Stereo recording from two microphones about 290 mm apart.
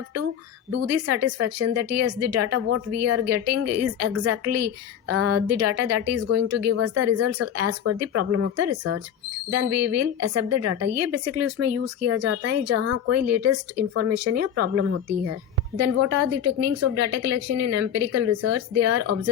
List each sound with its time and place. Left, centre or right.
0.7 s speech: right